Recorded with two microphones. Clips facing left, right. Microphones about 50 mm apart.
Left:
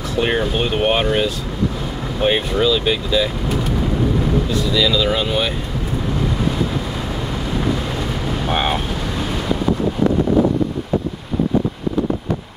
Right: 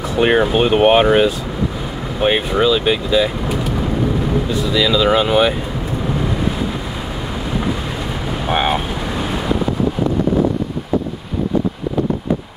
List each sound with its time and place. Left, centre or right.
0.1 s speech: centre
8.3 s vehicle: centre